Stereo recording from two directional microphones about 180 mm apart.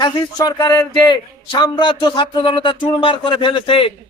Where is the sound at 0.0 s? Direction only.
20° left (ahead or behind).